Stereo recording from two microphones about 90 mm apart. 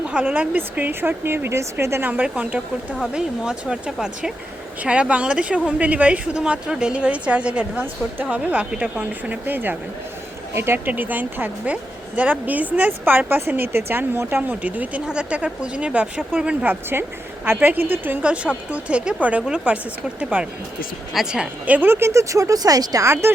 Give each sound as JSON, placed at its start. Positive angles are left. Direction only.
{"t": 0.0, "sound": "speech", "side_deg": -10}
{"t": 16.9, "sound": "speech", "side_deg": -25}
{"t": 21.8, "sound": "speech", "side_deg": -25}